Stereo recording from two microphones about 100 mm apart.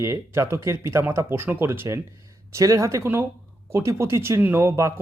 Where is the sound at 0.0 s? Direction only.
25° right (ahead or behind).